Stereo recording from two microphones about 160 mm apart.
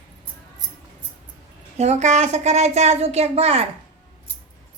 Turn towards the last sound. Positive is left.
turn(degrees=-40)  # may be behind; listen again after turning